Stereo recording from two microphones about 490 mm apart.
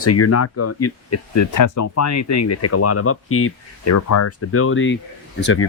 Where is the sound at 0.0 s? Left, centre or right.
Left.